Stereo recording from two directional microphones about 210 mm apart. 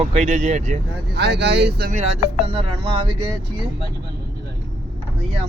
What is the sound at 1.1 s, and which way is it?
Speech, 50° right (ahead or behind).